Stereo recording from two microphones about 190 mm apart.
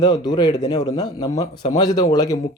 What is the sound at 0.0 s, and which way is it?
A man's voice, 20° left (ahead or behind).